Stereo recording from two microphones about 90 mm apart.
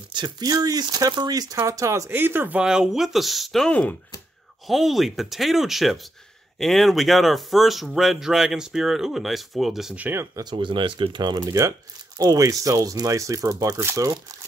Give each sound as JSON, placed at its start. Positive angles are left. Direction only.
{"t": 0.1, "sound": "speech", "side_deg": -55}
{"t": 1.6, "sound": "speech", "side_deg": -35}
{"t": 2.6, "sound": "speech", "side_deg": -10}
{"t": 9.9, "sound": "speech", "side_deg": -20}
{"t": 10.3, "sound": "speech", "side_deg": -55}
{"t": 11.3, "sound": "speech", "side_deg": -35}